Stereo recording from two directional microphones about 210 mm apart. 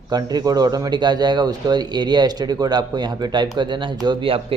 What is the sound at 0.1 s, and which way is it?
A man's voice, 20° right (ahead or behind).